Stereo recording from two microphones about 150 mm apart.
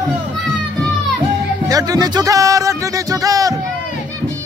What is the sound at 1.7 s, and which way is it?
Music, 25° right (ahead or behind).